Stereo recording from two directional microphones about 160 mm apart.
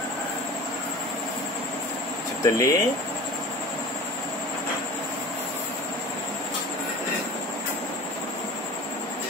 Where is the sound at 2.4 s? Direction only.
20° left (ahead or behind).